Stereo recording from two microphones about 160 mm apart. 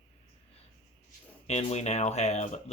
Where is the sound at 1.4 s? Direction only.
45° left (ahead or behind).